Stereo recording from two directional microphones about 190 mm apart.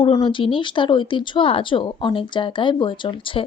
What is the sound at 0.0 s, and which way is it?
Speech, 25° left (ahead or behind).